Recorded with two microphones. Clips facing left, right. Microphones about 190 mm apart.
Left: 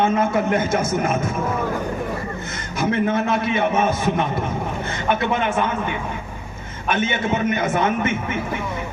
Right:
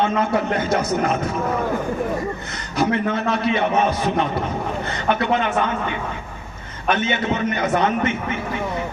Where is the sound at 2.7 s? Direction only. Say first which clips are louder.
Even; 50° left (ahead or behind).